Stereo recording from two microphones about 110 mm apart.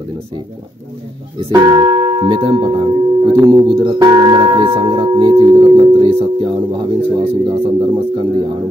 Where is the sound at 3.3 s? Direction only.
30° right (ahead or behind).